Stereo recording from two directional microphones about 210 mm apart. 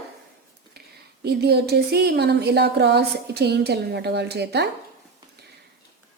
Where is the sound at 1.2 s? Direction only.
50° right (ahead or behind).